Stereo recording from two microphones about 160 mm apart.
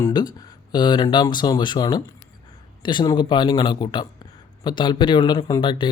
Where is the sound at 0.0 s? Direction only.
25° left (ahead or behind).